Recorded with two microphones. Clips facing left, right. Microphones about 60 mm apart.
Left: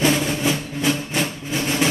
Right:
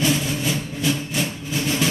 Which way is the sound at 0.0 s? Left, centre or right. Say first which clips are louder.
Left 3 dB; left.